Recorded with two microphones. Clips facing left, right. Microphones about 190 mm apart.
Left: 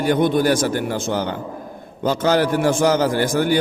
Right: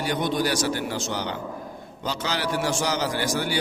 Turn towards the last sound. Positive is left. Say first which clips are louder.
# left 8 dB
turn(degrees=50)  # may be behind; listen again after turning